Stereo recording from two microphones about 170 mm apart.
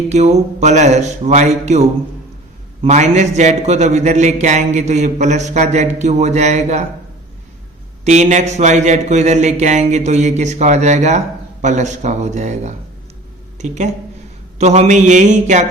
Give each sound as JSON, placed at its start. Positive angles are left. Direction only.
{"t": 0.1, "sound": "a sound", "side_deg": -40}
{"t": 2.8, "sound": "speech", "side_deg": -40}
{"t": 8.0, "sound": "speech", "side_deg": -45}